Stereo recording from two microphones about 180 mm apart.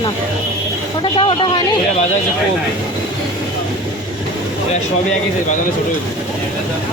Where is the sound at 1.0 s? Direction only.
25° left (ahead or behind).